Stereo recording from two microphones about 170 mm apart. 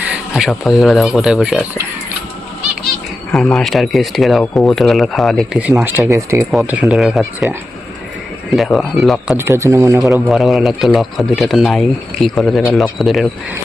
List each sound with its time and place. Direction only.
0.0 s speech: centre (ahead or behind)
3.3 s speech: centre (ahead or behind); by 6.4 s 15° right (ahead or behind)
6.5 s speech: 5° right (ahead or behind)
8.5 s speech: centre (ahead or behind)
9.4 s speech: 15° right (ahead or behind)
10.0 s speech: centre (ahead or behind)